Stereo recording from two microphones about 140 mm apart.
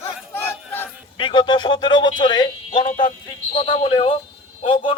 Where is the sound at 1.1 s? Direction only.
35° left (ahead or behind).